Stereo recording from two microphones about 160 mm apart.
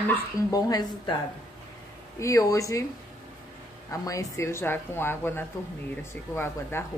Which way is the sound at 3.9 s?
20° left (ahead or behind).